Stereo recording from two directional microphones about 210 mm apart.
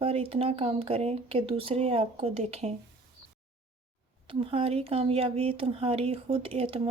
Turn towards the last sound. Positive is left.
turn(degrees=-25)  # may be behind; listen again after turning